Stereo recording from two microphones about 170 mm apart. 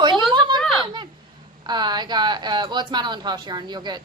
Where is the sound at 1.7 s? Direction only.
25° right (ahead or behind).